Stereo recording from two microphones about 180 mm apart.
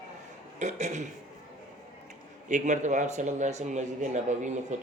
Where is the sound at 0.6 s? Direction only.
40° right (ahead or behind).